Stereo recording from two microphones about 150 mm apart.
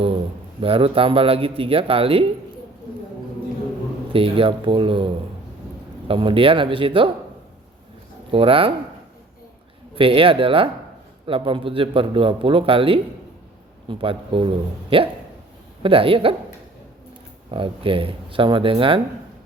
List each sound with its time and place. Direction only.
0.6 s a man's voice: 40° right (ahead or behind)
4.1 s a man's voice: 35° right (ahead or behind)
8.3 s a man's voice: 35° right (ahead or behind)
9.9 s a man's voice: 35° right (ahead or behind)
17.5 s a man's voice: 35° right (ahead or behind)